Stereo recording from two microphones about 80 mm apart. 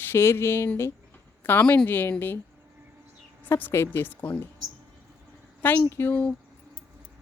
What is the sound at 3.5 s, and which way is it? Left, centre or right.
Speech, left.